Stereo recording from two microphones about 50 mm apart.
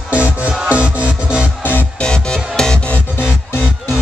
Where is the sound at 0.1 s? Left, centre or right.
Right.